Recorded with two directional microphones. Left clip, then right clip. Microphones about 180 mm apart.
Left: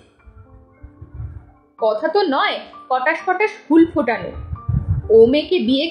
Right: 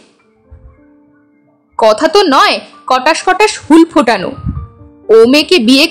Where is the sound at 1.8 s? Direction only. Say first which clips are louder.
Right 9 dB; 40° right (ahead or behind).